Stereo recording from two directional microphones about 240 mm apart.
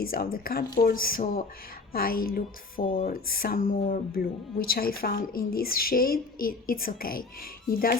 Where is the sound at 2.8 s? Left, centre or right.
Left.